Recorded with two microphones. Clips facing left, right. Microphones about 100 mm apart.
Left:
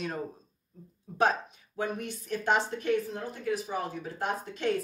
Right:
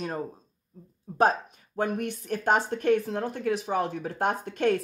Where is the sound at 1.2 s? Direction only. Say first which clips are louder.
Right 4 dB; 40° right (ahead or behind).